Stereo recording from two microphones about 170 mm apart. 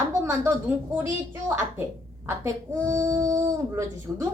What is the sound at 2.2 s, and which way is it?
A woman's voice, 15° right (ahead or behind).